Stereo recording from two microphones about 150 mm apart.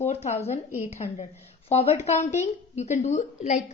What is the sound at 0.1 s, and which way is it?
A woman's voice, 45° left (ahead or behind).